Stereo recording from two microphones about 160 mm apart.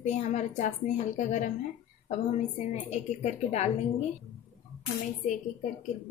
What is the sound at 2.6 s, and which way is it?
A woman's voice, 45° left (ahead or behind).